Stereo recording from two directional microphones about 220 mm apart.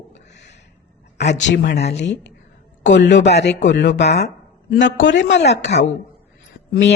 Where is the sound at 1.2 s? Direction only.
55° left (ahead or behind).